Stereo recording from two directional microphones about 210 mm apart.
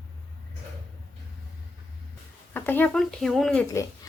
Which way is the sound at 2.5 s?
10° left (ahead or behind).